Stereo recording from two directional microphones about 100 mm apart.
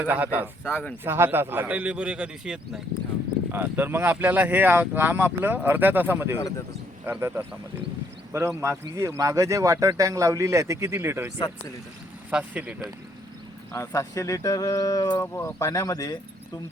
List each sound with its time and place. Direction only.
0.0 s speech: 15° right (ahead or behind)
0.6 s speech: 15° left (ahead or behind)
1.0 s speech: 25° right (ahead or behind); by 2.8 s 10° right (ahead or behind)
3.5 s speech: 20° right (ahead or behind)
12.3 s speech: 10° right (ahead or behind)
13.7 s speech: 30° left (ahead or behind)
15.1 s speech: 25° left (ahead or behind)